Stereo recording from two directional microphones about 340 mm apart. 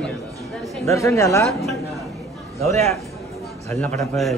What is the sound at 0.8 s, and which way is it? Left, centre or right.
Speech, centre.